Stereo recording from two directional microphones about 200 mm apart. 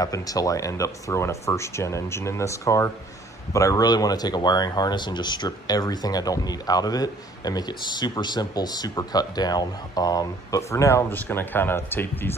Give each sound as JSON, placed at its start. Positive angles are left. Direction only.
{"t": 0.0, "sound": "speech", "side_deg": 20}